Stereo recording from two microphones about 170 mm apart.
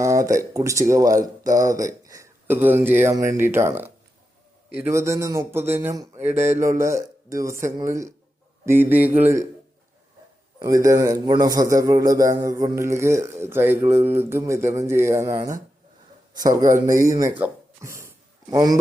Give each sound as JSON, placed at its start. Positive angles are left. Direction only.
{"t": 0.0, "sound": "a man's voice", "side_deg": -20}
{"t": 10.6, "sound": "a man's voice", "side_deg": -20}